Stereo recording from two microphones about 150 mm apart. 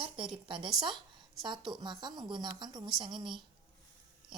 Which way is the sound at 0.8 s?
30° right (ahead or behind).